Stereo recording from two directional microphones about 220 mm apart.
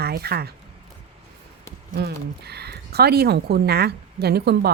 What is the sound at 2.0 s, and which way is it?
Speech, 45° right (ahead or behind).